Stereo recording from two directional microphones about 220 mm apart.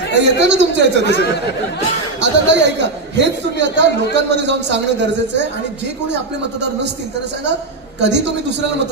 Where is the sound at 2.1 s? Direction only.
50° right (ahead or behind).